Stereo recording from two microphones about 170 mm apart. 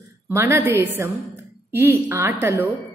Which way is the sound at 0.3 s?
15° right (ahead or behind).